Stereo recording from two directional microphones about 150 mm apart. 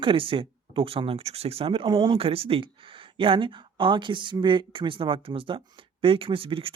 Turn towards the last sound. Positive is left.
turn(degrees=-35)  # may be behind; listen again after turning